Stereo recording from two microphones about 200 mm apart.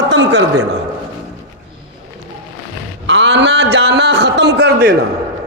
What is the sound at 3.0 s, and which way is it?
A man's voice, 60° right (ahead or behind).